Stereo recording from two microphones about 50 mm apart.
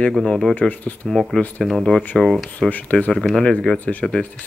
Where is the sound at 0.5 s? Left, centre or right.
Left.